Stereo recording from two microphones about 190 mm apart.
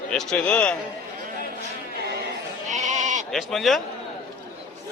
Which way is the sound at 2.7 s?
40° right (ahead or behind).